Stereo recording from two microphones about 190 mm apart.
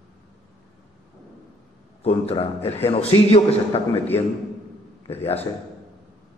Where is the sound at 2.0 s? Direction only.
30° left (ahead or behind).